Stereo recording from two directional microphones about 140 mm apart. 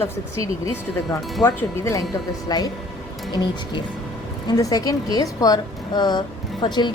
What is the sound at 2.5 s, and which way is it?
A woman's voice, 30° left (ahead or behind).